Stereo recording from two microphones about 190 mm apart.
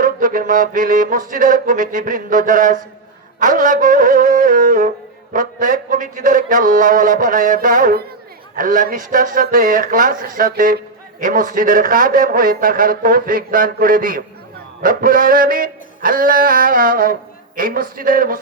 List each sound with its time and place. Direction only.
0.0 s a man's voice: 45° right (ahead or behind)
3.4 s wind instrument: 45° right (ahead or behind)
5.3 s a man's voice: 45° right (ahead or behind)